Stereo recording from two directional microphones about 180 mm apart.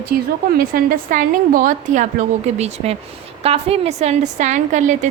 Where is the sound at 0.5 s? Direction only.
50° right (ahead or behind).